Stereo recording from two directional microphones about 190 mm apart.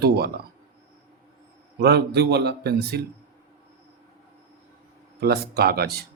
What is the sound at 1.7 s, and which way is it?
A man's voice, 60° right (ahead or behind).